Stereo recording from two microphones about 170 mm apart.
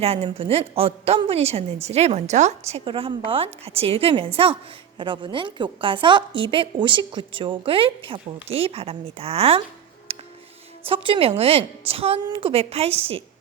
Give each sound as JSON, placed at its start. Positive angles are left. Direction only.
{"t": 0.0, "sound": "a woman's voice", "side_deg": -35}
{"t": 10.1, "sound": "music", "side_deg": -35}
{"t": 10.8, "sound": "a woman's voice", "side_deg": -30}